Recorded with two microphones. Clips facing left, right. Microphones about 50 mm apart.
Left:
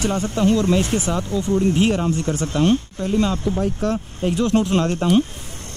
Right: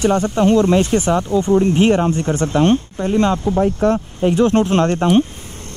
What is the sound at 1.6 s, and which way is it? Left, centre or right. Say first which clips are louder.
Speech: right 2 dB; right.